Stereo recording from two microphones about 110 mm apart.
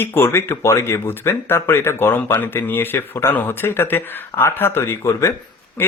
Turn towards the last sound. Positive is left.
turn(degrees=25)  # may be behind; listen again after turning